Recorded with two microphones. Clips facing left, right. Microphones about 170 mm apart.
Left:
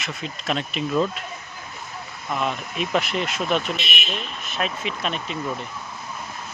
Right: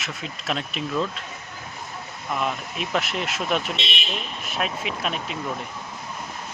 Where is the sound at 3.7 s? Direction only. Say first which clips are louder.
Left 1 dB; 30° right (ahead or behind).